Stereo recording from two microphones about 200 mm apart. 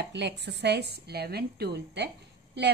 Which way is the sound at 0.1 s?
60° right (ahead or behind).